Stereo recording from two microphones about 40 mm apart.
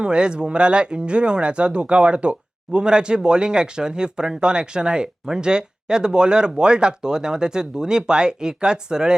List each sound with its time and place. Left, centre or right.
0.0 s speech: right